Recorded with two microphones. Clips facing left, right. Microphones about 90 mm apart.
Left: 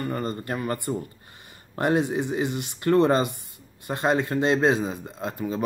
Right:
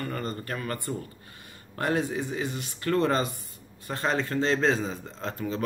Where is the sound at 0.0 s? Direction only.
25° left (ahead or behind).